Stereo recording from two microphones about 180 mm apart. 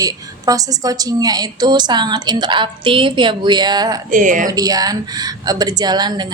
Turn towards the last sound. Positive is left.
turn(degrees=-25)  # may be behind; listen again after turning